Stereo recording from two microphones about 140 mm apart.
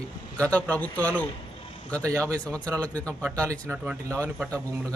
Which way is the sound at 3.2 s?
20° right (ahead or behind).